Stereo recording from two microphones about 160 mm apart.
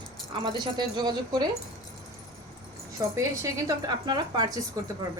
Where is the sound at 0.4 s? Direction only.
25° right (ahead or behind).